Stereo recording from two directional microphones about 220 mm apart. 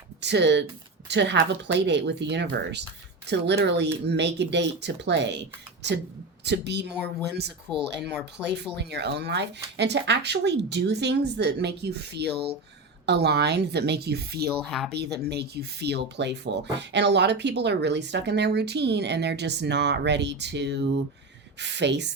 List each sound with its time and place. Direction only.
0.2 s speech: 50° right (ahead or behind)
6.4 s speech: 50° right (ahead or behind)
6.9 s speech: 5° left (ahead or behind)
8.7 s speech: 50° right (ahead or behind)
14.6 s speech: centre (ahead or behind)
15.2 s speech: 50° right (ahead or behind)